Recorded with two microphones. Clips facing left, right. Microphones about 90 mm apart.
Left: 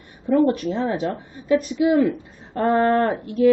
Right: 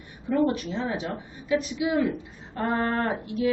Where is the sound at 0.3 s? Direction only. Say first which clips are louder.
Left 6 dB; 40° left (ahead or behind).